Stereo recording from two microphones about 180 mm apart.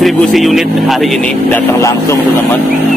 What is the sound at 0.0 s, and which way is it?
Speech, centre (ahead or behind).